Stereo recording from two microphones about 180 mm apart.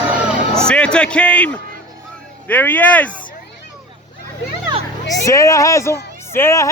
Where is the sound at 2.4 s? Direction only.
10° left (ahead or behind).